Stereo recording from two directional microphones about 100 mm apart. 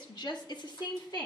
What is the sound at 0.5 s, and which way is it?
Speech, 45° left (ahead or behind).